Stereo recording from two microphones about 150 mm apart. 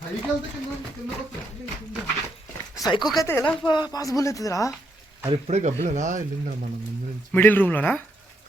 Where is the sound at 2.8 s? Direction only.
30° left (ahead or behind).